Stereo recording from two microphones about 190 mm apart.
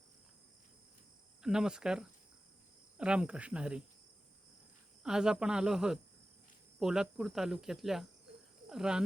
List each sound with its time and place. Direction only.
1.4 s speech: 5° right (ahead or behind)
5.0 s speech: 5° right (ahead or behind)